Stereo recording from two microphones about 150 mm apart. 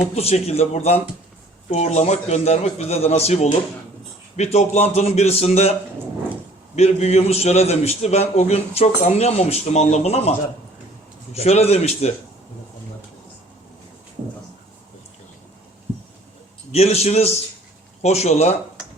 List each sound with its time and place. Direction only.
0.0 s a man's voice: 45° left (ahead or behind)
6.7 s a man's voice: 45° left (ahead or behind)
11.3 s a man's voice: 45° left (ahead or behind)
16.7 s a man's voice: 45° left (ahead or behind)